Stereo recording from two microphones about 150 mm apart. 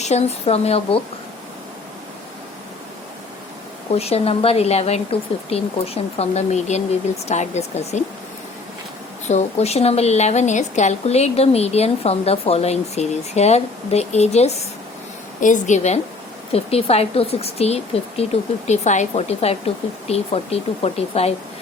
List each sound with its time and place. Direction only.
0.0 s a woman's voice: 45° left (ahead or behind)
3.9 s a woman's voice: 45° left (ahead or behind)
9.3 s a woman's voice: 45° left (ahead or behind)
15.4 s a woman's voice: 55° left (ahead or behind)